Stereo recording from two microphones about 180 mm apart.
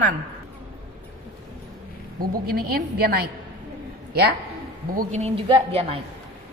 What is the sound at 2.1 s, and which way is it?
A woman's voice, 55° right (ahead or behind).